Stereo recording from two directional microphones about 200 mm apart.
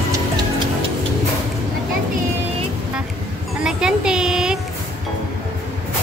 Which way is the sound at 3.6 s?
5° right (ahead or behind).